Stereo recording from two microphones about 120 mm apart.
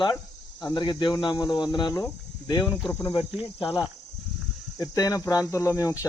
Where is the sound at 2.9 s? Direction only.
25° left (ahead or behind).